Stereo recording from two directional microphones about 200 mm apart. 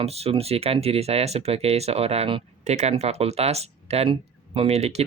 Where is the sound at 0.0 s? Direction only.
30° right (ahead or behind).